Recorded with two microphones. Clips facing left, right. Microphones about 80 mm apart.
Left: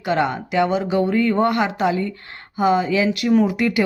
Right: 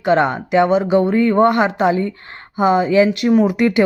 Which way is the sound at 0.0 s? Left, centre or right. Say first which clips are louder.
Right 5 dB; right.